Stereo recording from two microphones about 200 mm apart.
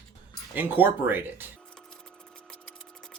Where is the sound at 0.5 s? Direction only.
10° right (ahead or behind).